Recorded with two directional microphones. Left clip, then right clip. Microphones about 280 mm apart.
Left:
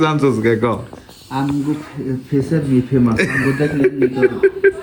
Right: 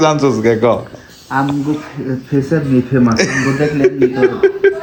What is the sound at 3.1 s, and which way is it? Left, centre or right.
Speech, centre.